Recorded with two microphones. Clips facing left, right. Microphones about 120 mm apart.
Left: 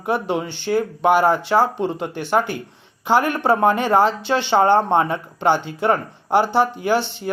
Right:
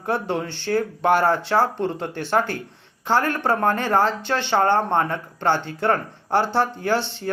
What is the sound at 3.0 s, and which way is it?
Speech, 15° left (ahead or behind).